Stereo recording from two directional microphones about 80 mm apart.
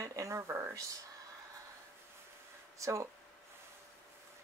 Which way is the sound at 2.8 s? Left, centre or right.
Right.